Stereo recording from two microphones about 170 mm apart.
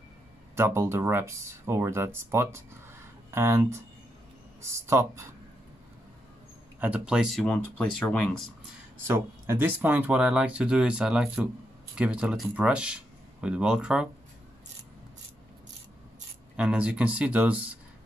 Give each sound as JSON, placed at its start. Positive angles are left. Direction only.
{"t": 0.6, "sound": "speech", "side_deg": -15}
{"t": 6.8, "sound": "speech", "side_deg": -5}
{"t": 9.0, "sound": "speech", "side_deg": -15}
{"t": 16.5, "sound": "speech", "side_deg": -5}